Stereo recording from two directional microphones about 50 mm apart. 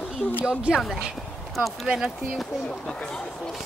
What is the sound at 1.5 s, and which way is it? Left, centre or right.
Speech, centre.